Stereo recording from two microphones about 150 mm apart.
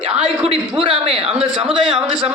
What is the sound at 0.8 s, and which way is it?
Speech, 35° right (ahead or behind).